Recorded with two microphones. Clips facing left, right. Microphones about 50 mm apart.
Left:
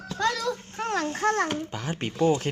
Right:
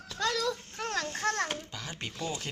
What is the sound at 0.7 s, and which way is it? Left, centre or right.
Speech, left.